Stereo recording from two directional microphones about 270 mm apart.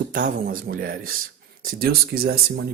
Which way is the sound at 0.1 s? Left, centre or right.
Right.